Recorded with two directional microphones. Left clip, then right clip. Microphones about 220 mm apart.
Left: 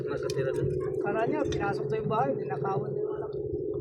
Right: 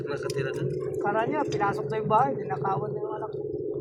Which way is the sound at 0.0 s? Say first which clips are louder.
Even; 50° right (ahead or behind).